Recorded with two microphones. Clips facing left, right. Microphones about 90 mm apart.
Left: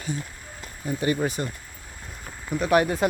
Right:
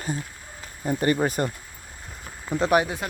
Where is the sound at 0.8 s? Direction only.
45° right (ahead or behind).